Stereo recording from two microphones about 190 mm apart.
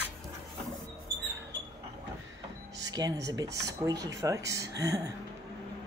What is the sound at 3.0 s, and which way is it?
Speech, 20° right (ahead or behind).